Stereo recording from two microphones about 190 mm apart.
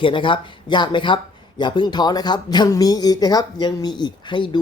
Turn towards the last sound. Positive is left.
turn(degrees=25)  # may be behind; listen again after turning